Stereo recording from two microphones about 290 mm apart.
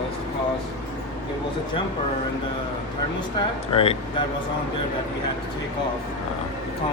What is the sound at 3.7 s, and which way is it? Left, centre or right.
Speech, centre.